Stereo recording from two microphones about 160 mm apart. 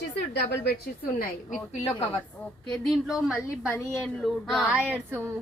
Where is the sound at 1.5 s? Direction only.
45° left (ahead or behind).